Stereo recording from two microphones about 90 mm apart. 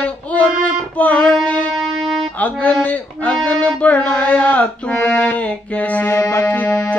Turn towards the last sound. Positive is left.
turn(degrees=20)  # may be behind; listen again after turning